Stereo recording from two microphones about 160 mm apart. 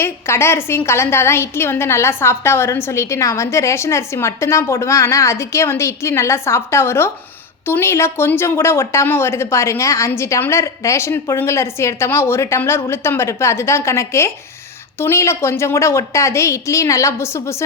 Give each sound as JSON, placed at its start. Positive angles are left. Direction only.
{"t": 0.0, "sound": "a woman's voice", "side_deg": 15}